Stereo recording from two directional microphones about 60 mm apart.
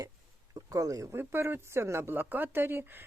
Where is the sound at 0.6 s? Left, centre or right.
Right.